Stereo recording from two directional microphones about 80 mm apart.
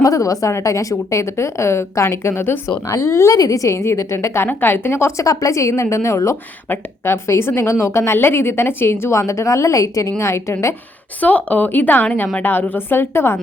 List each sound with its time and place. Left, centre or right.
0.0 s a woman's voice: left
11.2 s a woman's voice: centre